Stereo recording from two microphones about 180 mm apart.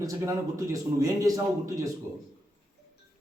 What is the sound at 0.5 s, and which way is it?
A man's voice, 20° right (ahead or behind).